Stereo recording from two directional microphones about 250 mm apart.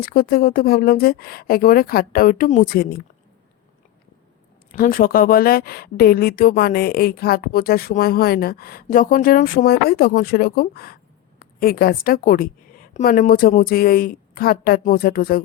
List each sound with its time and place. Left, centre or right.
0.0 s speech: left
4.7 s speech: left